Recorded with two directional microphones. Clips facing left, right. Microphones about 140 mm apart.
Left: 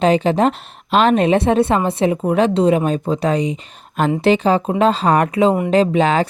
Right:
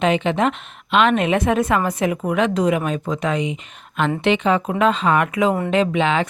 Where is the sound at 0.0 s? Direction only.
35° left (ahead or behind).